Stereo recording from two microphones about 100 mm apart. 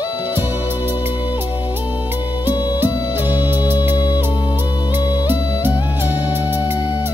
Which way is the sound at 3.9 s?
45° left (ahead or behind).